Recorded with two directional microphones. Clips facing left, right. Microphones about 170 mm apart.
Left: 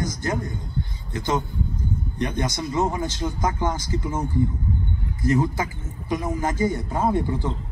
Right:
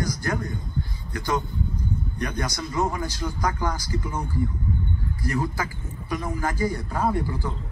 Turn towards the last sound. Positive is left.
turn(degrees=20)  # may be behind; listen again after turning